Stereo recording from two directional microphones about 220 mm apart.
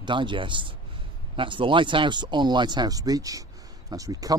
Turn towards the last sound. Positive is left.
turn(degrees=-15)  # may be behind; listen again after turning